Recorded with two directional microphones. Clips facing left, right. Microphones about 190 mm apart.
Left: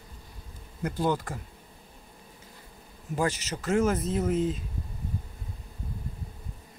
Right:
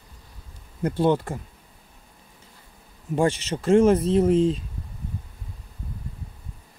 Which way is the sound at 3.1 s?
30° right (ahead or behind).